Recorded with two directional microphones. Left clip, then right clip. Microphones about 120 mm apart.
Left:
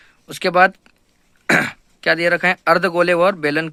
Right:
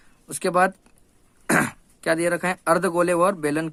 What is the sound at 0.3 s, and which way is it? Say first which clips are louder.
Speech: left 6 dB; 20° left (ahead or behind).